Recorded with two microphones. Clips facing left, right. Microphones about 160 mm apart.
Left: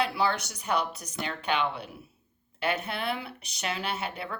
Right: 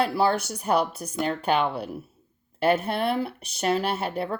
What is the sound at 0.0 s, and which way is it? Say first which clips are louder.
Speech: right 5 dB; 50° right (ahead or behind).